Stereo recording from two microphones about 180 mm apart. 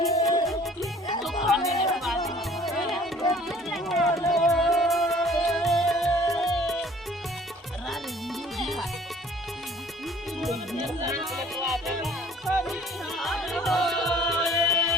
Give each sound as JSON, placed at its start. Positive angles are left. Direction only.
{"t": 0.1, "sound": "music", "side_deg": 20}
{"t": 1.2, "sound": "music", "side_deg": 0}
{"t": 1.6, "sound": "music", "side_deg": 20}
{"t": 1.9, "sound": "music", "side_deg": 0}
{"t": 3.3, "sound": "a sound", "side_deg": 0}
{"t": 4.3, "sound": "music", "side_deg": 0}
{"t": 8.5, "sound": "music", "side_deg": 0}
{"t": 10.4, "sound": "music", "side_deg": 0}